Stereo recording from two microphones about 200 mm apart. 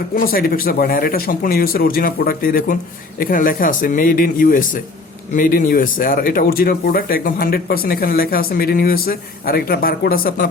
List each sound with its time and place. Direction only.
0.2 s speech: 45° left (ahead or behind)